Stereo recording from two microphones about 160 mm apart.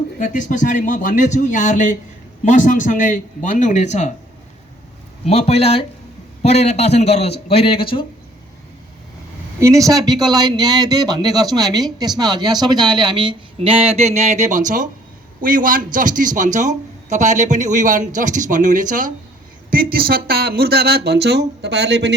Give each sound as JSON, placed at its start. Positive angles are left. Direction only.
{"t": 0.2, "sound": "speech", "side_deg": 50}
{"t": 5.2, "sound": "speech", "side_deg": 40}
{"t": 9.6, "sound": "a man's voice", "side_deg": -20}
{"t": 19.7, "sound": "speech", "side_deg": -65}